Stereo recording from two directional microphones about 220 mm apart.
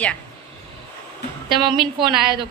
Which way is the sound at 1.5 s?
20° right (ahead or behind).